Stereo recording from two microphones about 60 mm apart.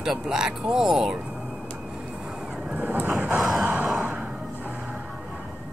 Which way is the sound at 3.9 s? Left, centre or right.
Right.